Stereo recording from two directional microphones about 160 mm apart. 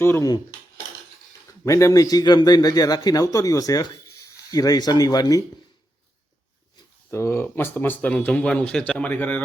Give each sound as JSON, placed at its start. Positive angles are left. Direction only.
{"t": 0.0, "sound": "a man's voice", "side_deg": 15}
{"t": 1.6, "sound": "a man's voice", "side_deg": 20}
{"t": 7.1, "sound": "speech", "side_deg": 15}